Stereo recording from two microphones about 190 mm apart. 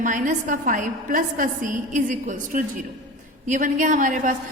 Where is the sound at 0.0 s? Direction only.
45° right (ahead or behind).